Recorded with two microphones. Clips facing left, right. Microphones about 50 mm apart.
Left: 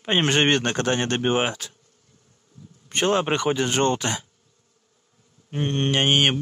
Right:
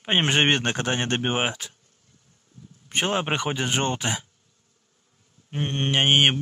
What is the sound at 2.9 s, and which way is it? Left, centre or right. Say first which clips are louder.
Speech: left 3 dB; centre.